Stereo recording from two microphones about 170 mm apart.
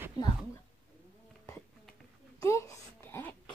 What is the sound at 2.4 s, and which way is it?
Wail, 15° left (ahead or behind).